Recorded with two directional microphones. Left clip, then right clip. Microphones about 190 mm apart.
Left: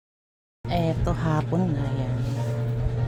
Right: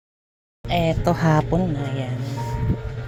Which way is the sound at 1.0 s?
20° right (ahead or behind).